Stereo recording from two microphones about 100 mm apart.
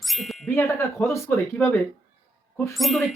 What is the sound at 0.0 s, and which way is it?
Wind chime, centre (ahead or behind).